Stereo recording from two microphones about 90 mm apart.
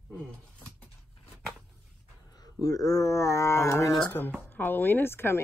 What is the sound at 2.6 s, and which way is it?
Speech, 40° left (ahead or behind).